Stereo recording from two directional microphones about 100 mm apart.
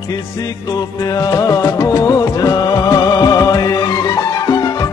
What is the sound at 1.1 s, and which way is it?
Music, 35° left (ahead or behind).